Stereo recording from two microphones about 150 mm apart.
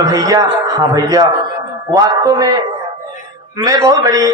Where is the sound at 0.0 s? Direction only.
25° right (ahead or behind).